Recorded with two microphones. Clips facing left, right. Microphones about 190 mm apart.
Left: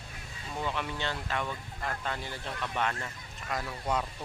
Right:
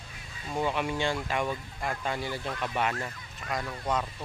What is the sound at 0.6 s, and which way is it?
Speech, 15° right (ahead or behind).